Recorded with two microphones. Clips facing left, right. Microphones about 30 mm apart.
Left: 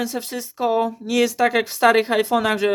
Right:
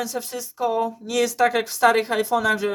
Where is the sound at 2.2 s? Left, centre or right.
Left.